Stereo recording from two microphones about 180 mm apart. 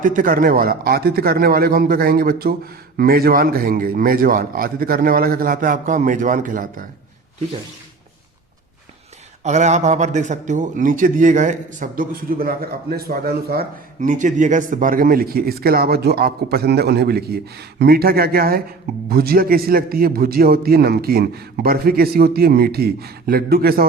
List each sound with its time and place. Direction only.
0.0 s a man's voice: 45° right (ahead or behind)
9.4 s a man's voice: 40° right (ahead or behind); by 23.8 s 55° right (ahead or behind)